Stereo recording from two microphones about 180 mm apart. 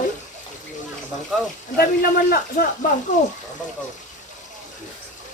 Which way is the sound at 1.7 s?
60° left (ahead or behind).